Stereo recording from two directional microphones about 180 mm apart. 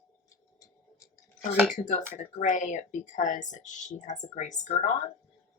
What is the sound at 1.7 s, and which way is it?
Speech, 45° left (ahead or behind).